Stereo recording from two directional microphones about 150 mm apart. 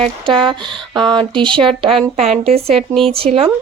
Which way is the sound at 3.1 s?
40° right (ahead or behind).